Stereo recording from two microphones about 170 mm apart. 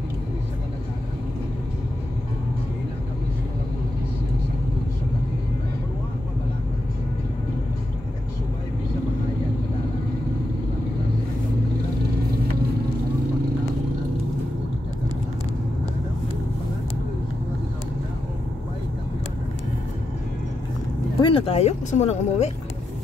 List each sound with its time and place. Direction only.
21.2 s speech: 30° left (ahead or behind)